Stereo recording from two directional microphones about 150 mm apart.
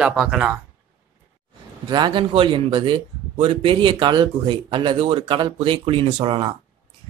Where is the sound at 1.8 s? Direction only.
30° right (ahead or behind).